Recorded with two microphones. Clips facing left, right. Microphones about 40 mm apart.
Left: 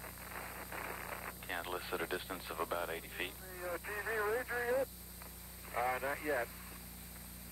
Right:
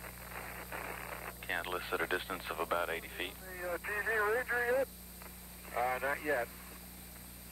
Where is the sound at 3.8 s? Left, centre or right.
Centre.